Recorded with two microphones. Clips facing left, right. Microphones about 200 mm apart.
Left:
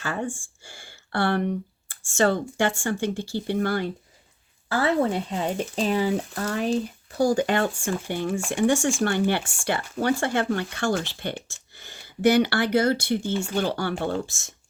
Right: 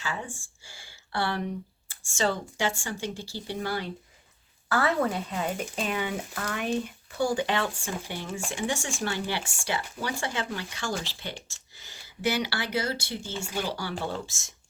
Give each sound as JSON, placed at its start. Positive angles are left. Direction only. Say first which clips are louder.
{"t": 0.0, "sound": "speech", "louder": "left 6 dB", "side_deg": 55}
{"t": 4.7, "sound": "speech", "louder": "left 3 dB", "side_deg": 30}